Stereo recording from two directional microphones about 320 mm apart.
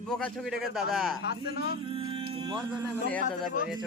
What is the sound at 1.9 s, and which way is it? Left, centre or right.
Music, centre.